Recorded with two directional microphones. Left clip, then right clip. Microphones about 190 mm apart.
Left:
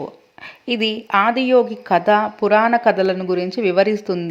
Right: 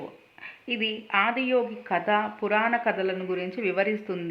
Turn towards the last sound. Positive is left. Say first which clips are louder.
# left 10 dB
turn(degrees=45)  # may be behind; listen again after turning